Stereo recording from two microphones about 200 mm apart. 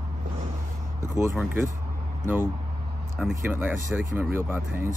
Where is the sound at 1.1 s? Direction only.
10° right (ahead or behind).